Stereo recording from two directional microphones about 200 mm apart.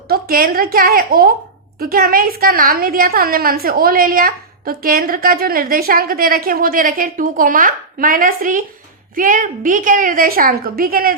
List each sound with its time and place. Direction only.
0.1 s a woman's voice: 45° right (ahead or behind)